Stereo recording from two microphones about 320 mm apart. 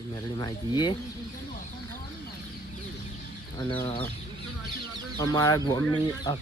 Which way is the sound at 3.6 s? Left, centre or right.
Centre.